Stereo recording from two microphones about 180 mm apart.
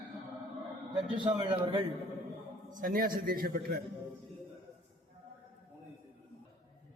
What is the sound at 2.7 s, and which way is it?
A man's voice, 50° right (ahead or behind).